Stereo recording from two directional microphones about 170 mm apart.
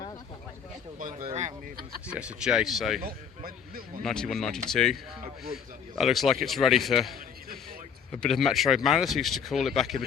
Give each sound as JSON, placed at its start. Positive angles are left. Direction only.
{"t": 1.2, "sound": "speech", "side_deg": -40}
{"t": 2.0, "sound": "speech", "side_deg": -5}
{"t": 3.0, "sound": "speech", "side_deg": -60}
{"t": 4.0, "sound": "speech", "side_deg": 5}
{"t": 6.0, "sound": "speech", "side_deg": 0}